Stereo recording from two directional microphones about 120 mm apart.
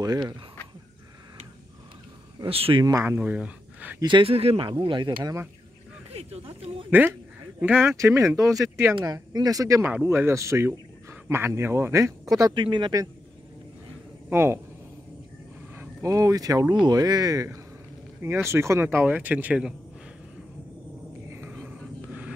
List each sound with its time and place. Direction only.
0.0 s speech: 35° right (ahead or behind)
2.5 s speech: 55° right (ahead or behind)
2.8 s speech: 25° right (ahead or behind)
4.0 s speech: 45° right (ahead or behind)
6.1 s speech: 55° right (ahead or behind)
6.9 s speech: 15° right (ahead or behind)
12.5 s speech: 40° right (ahead or behind)
14.3 s speech: 20° right (ahead or behind)
15.7 s speech: 25° right (ahead or behind)
21.3 s a sound: 15° right (ahead or behind)
21.6 s wild animals: 10° right (ahead or behind)